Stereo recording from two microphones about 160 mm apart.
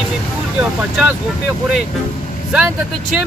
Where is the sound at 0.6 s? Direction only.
10° right (ahead or behind).